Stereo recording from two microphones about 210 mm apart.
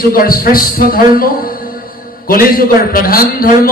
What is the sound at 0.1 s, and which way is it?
A man's voice, 45° left (ahead or behind).